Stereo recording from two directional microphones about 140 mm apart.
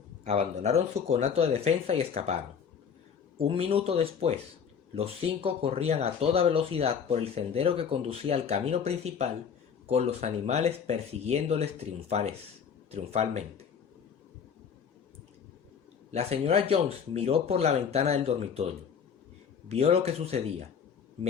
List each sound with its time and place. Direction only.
0.3 s speech: 50° right (ahead or behind)
3.3 s speech: 40° right (ahead or behind)
16.1 s speech: 45° right (ahead or behind)
19.6 s speech: 45° right (ahead or behind)